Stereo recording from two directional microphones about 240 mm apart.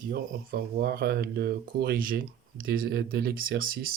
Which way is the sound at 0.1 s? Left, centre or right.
Right.